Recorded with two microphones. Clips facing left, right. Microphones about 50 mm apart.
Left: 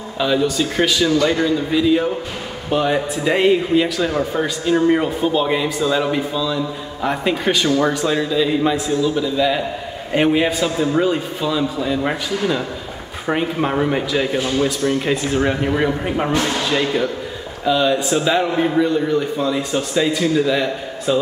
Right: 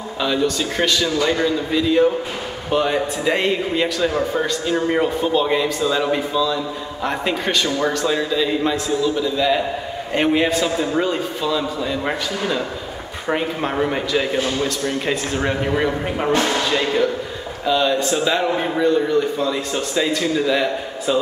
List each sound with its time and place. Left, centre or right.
0.2 s speech: centre